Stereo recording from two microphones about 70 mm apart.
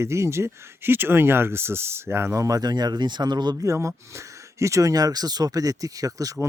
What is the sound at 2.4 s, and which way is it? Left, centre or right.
Speech, right.